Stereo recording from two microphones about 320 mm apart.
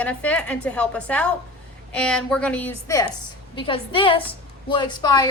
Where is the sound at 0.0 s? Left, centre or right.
Centre.